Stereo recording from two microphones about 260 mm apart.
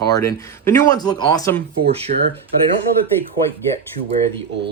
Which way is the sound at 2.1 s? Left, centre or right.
Right.